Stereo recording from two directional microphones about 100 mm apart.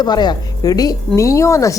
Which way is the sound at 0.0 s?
45° left (ahead or behind).